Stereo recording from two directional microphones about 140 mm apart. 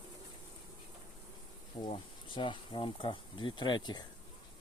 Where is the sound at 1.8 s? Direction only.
35° left (ahead or behind).